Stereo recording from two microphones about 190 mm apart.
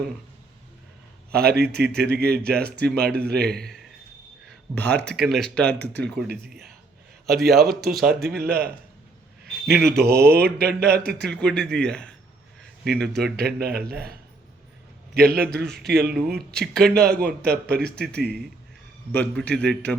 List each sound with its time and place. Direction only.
1.3 s a man's voice: 55° right (ahead or behind)
3.5 s speech: centre (ahead or behind)
4.4 s a sound: 10° left (ahead or behind)
4.9 s a man's voice: 60° right (ahead or behind)
5.2 s speech: centre (ahead or behind)
7.3 s speech: centre (ahead or behind)
8.3 s a man's voice: 55° right (ahead or behind)
11.3 s speech: 5° left (ahead or behind)
13.3 s a man's voice: 55° right (ahead or behind)
16.1 s speech: centre (ahead or behind)
17.4 s a man's voice: 55° right (ahead or behind)
19.1 s a man's voice: 5° left (ahead or behind)